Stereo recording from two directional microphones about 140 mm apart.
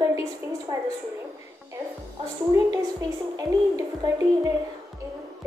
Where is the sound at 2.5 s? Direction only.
30° right (ahead or behind).